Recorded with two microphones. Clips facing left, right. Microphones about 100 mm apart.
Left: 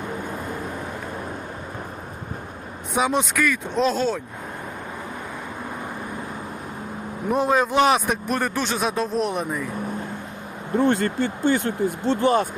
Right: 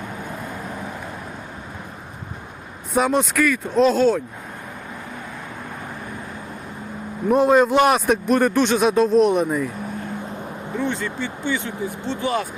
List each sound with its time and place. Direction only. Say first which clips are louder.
2.9 s a man's voice: right 3 dB; centre (ahead or behind)
7.3 s a man's voice: right 5 dB; centre (ahead or behind)
10.8 s speech: left 5 dB; 50° left (ahead or behind)